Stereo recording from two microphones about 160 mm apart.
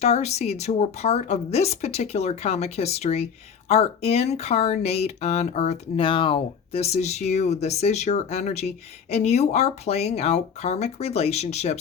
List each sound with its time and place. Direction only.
0.0 s speech: 45° left (ahead or behind)